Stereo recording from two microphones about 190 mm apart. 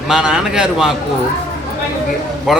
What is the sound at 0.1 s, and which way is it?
Speech, 5° right (ahead or behind).